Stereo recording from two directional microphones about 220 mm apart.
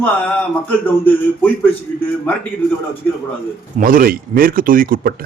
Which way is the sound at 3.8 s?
40° right (ahead or behind).